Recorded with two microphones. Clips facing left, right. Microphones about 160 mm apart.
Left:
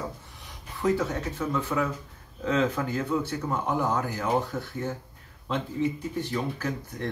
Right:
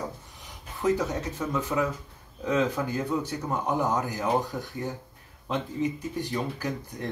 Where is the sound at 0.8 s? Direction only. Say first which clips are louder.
Even; 20° right (ahead or behind).